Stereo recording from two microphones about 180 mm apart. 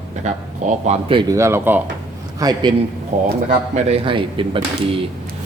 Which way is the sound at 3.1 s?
40° right (ahead or behind).